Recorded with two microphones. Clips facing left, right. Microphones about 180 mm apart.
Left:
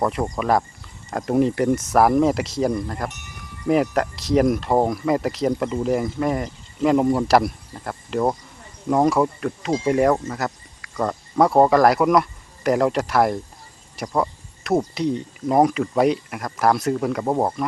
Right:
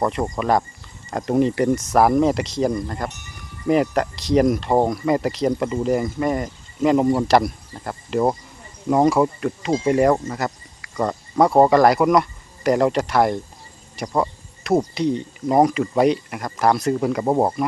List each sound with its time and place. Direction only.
0.0 s speech: centre (ahead or behind)